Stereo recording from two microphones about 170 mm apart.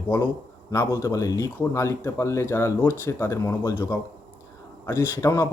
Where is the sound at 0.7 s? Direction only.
15° left (ahead or behind).